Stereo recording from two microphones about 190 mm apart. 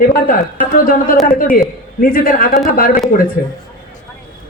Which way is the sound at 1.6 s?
50° left (ahead or behind).